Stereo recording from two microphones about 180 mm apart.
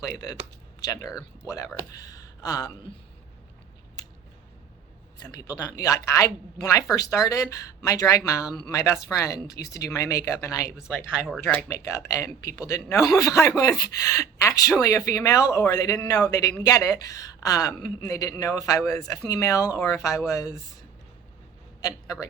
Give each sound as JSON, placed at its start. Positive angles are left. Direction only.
{"t": 0.0, "sound": "speech", "side_deg": 20}
{"t": 5.2, "sound": "speech", "side_deg": 20}
{"t": 11.9, "sound": "speech", "side_deg": 15}
{"t": 21.8, "sound": "speech", "side_deg": 20}